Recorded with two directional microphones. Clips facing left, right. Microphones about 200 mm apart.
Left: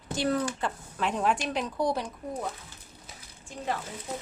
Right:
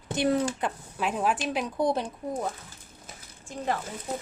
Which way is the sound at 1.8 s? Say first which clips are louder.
Right 3 dB; 25° right (ahead or behind).